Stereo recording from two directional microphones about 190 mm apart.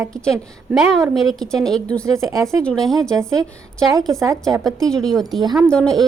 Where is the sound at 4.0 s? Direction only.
Centre (ahead or behind).